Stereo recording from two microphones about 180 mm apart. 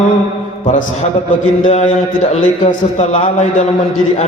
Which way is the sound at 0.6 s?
45° left (ahead or behind).